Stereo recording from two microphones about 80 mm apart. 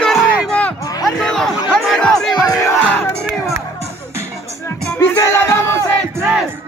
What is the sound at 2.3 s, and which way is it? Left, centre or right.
Speech, left.